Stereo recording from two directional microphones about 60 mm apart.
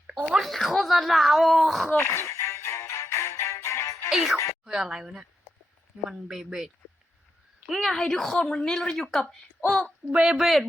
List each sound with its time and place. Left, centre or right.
0.3 s speech: centre
2.0 s music: left
4.1 s speech: centre
7.7 s speech: centre
10.1 s speech: centre